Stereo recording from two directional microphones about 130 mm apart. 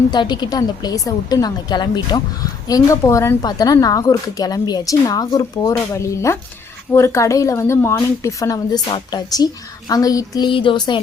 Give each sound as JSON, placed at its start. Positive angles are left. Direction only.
{"t": 0.1, "sound": "a woman's voice", "side_deg": 35}
{"t": 10.5, "sound": "a woman's voice", "side_deg": 40}